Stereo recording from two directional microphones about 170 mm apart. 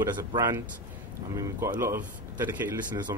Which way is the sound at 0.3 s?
25° right (ahead or behind).